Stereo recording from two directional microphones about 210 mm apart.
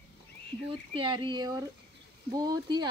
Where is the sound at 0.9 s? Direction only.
25° right (ahead or behind).